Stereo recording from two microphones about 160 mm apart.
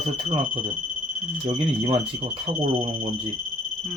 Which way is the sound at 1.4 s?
35° right (ahead or behind).